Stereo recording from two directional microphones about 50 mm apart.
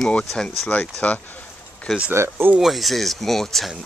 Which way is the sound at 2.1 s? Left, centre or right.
Right.